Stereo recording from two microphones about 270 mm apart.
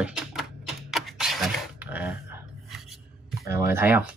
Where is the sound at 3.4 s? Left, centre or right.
Centre.